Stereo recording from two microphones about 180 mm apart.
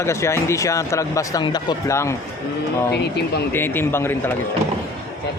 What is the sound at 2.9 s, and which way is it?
Speech, 65° left (ahead or behind).